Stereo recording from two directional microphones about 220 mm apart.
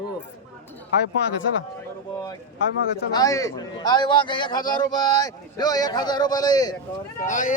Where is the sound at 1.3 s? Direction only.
60° left (ahead or behind).